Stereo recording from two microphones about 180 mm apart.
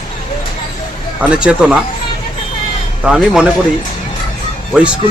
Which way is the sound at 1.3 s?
5° right (ahead or behind).